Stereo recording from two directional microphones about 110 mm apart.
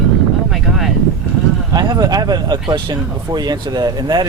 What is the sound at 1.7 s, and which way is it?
Speech, 40° right (ahead or behind).